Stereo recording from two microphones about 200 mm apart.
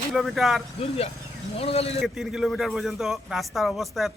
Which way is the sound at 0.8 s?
30° left (ahead or behind).